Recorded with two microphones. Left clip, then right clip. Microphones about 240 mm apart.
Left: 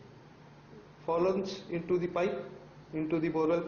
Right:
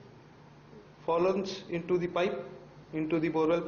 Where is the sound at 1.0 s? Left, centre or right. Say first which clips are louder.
Right 2 dB; centre.